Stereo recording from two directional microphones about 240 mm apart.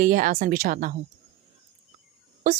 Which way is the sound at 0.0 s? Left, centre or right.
Right.